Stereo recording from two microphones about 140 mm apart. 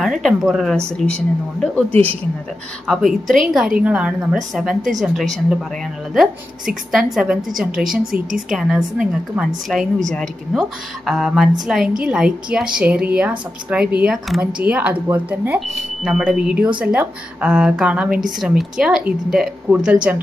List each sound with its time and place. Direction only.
0.0 s a woman's voice: centre (ahead or behind)
1.9 s a woman's voice: 45° right (ahead or behind)
2.9 s a woman's voice: centre (ahead or behind)